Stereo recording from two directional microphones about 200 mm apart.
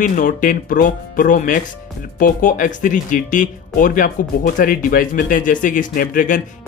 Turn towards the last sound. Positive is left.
turn(degrees=40)  # may be behind; listen again after turning